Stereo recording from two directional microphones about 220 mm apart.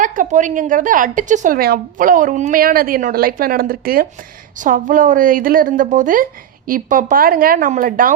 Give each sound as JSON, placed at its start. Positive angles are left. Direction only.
{"t": 0.0, "sound": "a woman's voice", "side_deg": -35}